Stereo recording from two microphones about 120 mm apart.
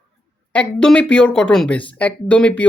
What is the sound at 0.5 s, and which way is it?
Speech, 10° left (ahead or behind).